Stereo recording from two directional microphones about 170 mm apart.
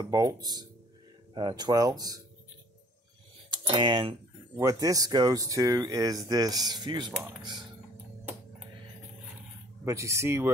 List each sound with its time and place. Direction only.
0.0 s speech: 20° right (ahead or behind)
3.4 s speech: 25° right (ahead or behind)
9.8 s speech: 15° right (ahead or behind)